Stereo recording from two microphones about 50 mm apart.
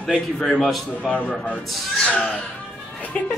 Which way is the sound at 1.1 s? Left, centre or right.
Left.